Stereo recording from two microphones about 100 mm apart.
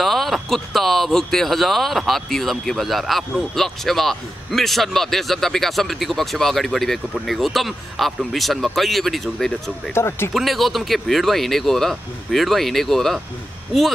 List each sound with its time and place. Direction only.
0.0 s speech: centre (ahead or behind)
9.9 s speech: 25° left (ahead or behind)
10.3 s speech: centre (ahead or behind)